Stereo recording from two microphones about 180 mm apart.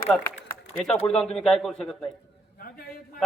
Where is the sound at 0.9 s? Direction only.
5° left (ahead or behind).